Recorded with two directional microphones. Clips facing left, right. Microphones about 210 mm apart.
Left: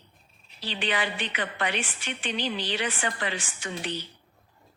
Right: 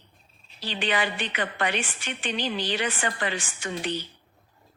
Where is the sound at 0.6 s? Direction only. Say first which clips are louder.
Right 2 dB; 50° right (ahead or behind).